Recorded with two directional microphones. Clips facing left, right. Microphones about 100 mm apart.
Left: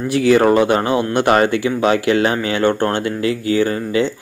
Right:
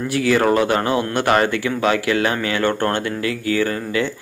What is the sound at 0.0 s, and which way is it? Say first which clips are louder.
Speech: left 4 dB; 20° left (ahead or behind).